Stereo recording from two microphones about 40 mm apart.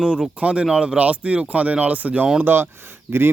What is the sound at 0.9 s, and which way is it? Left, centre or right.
Speech, right.